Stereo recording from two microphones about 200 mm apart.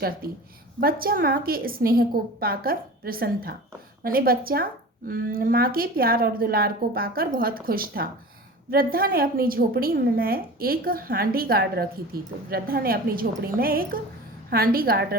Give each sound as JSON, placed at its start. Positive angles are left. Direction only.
{"t": 0.2, "sound": "a woman's voice", "side_deg": -50}